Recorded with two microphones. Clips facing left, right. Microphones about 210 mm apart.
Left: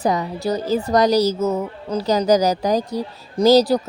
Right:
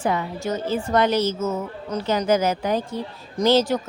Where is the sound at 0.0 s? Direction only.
40° left (ahead or behind).